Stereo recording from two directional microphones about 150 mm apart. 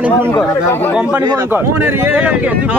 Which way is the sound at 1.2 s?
25° right (ahead or behind).